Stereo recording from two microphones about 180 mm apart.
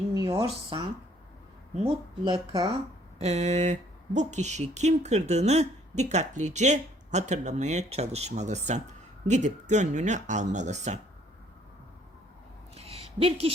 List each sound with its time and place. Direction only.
0.3 s speech: 30° right (ahead or behind)
2.2 s speech: 25° right (ahead or behind)
3.2 s speech: 40° right (ahead or behind)
12.7 s a sound: 35° right (ahead or behind)